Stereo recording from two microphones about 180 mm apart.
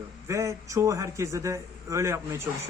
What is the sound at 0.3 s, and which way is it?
Speech, 15° right (ahead or behind).